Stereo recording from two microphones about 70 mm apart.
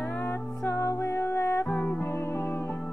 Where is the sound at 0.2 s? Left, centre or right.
Left.